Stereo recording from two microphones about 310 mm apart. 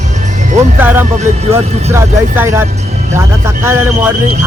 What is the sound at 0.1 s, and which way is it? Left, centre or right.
Music, right.